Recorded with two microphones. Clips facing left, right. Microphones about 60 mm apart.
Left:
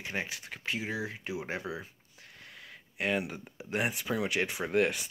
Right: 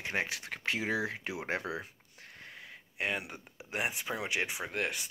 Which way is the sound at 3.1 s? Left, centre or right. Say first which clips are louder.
Left 5 dB; centre.